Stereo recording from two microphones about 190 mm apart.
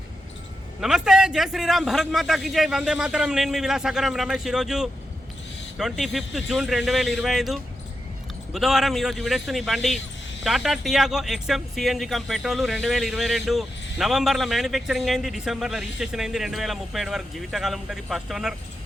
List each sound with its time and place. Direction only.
0.8 s speech: centre (ahead or behind)